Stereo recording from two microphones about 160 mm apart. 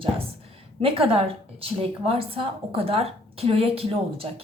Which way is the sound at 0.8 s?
35° right (ahead or behind).